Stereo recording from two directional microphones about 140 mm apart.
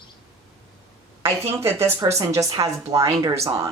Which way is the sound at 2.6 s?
30° right (ahead or behind).